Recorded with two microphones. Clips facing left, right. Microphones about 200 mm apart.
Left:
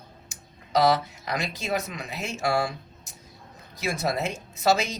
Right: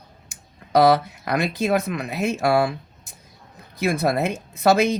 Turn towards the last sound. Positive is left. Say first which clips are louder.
# right 6 dB
turn(degrees=-55)  # may be behind; listen again after turning